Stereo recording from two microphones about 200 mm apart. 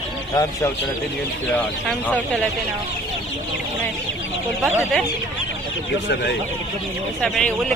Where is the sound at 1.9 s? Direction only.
5° left (ahead or behind).